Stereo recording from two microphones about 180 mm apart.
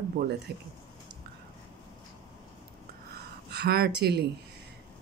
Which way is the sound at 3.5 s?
60° right (ahead or behind).